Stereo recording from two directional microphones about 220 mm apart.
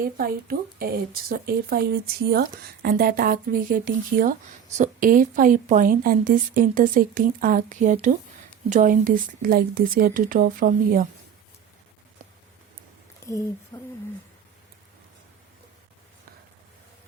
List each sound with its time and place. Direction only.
0.0 s speech: 45° right (ahead or behind)
13.2 s speech: 15° left (ahead or behind)
13.7 s a sound: 15° left (ahead or behind)